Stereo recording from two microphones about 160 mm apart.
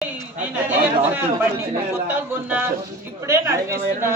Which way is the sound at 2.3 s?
15° right (ahead or behind).